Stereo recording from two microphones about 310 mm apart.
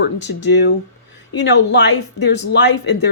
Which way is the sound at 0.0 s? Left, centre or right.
Left.